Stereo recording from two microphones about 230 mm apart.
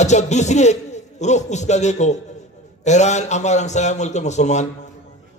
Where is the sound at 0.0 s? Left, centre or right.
Left.